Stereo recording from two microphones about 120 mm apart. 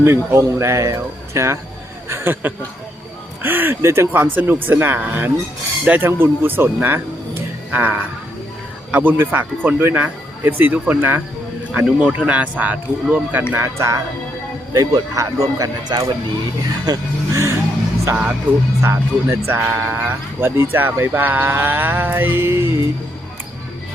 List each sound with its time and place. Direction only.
0.0 s speech: 20° right (ahead or behind)
18.8 s speech: 20° right (ahead or behind)